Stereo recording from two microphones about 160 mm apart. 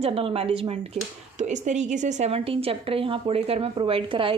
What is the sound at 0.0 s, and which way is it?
Speech, 35° right (ahead or behind).